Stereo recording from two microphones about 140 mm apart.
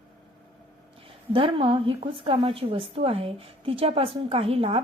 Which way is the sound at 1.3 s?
40° right (ahead or behind).